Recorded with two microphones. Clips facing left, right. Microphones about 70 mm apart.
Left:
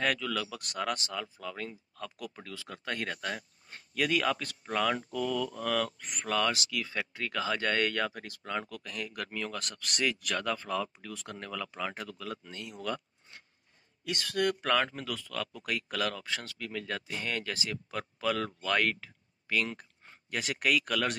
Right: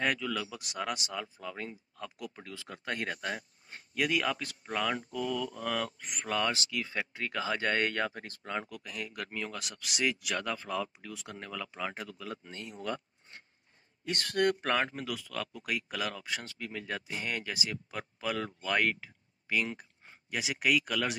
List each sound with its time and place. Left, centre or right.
0.0 s speech: centre
8.8 s speech: centre
9.3 s speech: centre
9.6 s speech: centre; by 13.4 s right
14.0 s speech: right
15.0 s speech: centre